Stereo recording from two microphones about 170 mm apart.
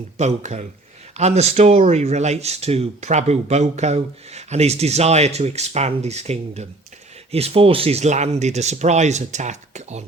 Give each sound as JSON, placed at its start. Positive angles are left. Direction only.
{"t": 0.2, "sound": "speech", "side_deg": -45}